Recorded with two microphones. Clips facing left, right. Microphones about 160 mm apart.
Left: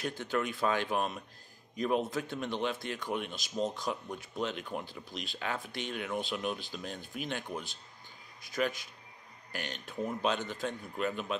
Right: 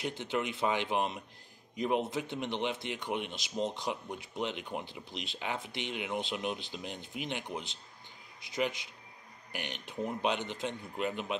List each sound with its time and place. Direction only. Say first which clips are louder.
0.0 s a man's voice: left 1 dB; 20° right (ahead or behind)